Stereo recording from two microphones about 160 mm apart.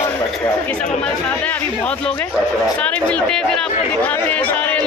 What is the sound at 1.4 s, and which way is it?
Speech, 10° left (ahead or behind).